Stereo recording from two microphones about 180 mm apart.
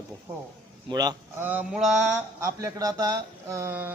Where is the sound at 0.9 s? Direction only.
20° right (ahead or behind).